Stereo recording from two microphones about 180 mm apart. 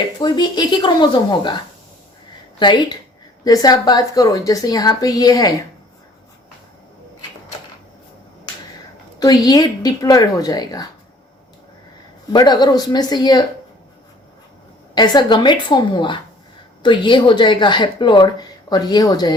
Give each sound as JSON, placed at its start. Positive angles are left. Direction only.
{"t": 0.2, "sound": "speech", "side_deg": 25}
{"t": 9.1, "sound": "speech", "side_deg": 20}
{"t": 12.3, "sound": "speech", "side_deg": 25}
{"t": 14.9, "sound": "speech", "side_deg": 25}